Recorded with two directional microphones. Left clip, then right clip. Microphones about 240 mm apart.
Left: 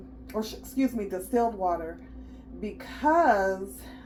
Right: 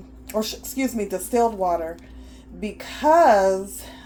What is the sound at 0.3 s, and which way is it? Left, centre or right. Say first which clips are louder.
Speech: right 5 dB; right.